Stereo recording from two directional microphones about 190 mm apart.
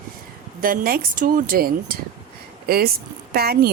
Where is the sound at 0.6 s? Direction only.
50° right (ahead or behind).